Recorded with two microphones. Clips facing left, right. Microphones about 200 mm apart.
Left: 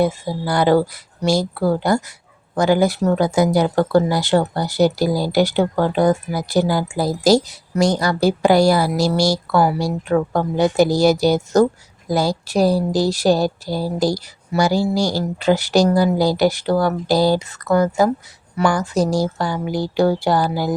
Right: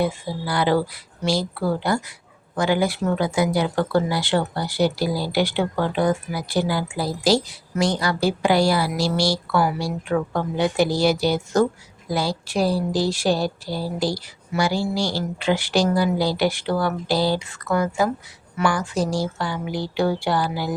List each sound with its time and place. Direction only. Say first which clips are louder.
0.0 s speech: left 5 dB; 45° left (ahead or behind)